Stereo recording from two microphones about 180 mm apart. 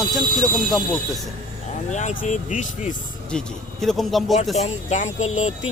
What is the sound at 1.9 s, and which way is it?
Speech, 45° left (ahead or behind).